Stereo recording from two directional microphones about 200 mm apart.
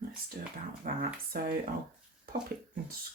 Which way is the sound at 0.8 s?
45° right (ahead or behind).